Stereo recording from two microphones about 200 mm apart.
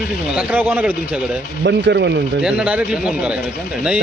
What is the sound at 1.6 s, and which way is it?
Speech, 60° right (ahead or behind).